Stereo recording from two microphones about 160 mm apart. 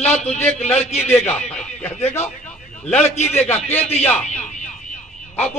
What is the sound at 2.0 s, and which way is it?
Speech, 45° left (ahead or behind).